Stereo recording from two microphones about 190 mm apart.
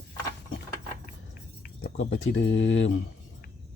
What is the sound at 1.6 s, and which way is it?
Speech, 75° left (ahead or behind).